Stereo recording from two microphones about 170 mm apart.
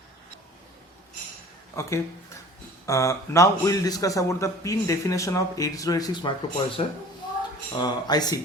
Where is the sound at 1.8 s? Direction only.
15° left (ahead or behind).